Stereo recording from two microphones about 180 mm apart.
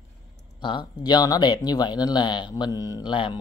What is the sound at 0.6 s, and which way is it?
Speech, 25° left (ahead or behind).